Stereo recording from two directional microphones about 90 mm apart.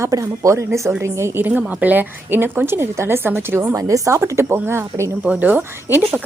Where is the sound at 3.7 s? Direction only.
35° right (ahead or behind).